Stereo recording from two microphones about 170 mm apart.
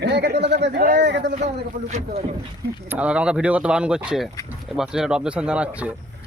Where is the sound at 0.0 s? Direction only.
75° right (ahead or behind).